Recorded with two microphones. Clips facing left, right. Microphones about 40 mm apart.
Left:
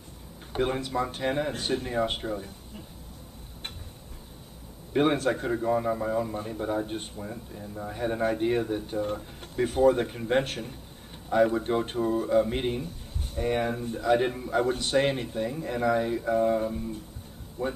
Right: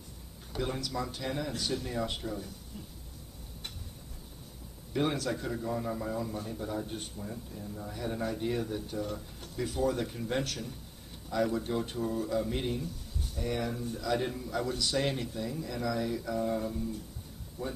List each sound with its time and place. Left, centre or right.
0.5 s speech: left
4.9 s speech: left